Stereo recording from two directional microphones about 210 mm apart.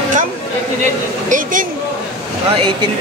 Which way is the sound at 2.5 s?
25° right (ahead or behind).